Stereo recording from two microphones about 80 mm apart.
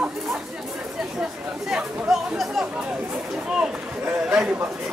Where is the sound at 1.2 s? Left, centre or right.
Centre.